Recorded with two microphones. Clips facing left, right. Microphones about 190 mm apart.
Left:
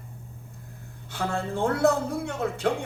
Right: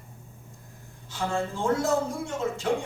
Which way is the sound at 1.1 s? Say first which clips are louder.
Even; 60° left (ahead or behind).